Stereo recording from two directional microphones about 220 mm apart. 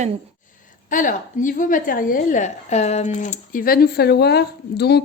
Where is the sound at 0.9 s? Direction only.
35° left (ahead or behind).